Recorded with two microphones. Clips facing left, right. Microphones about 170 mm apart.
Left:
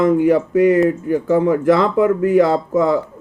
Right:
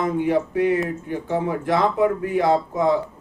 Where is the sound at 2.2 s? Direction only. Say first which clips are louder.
Left 6 dB; 65° left (ahead or behind).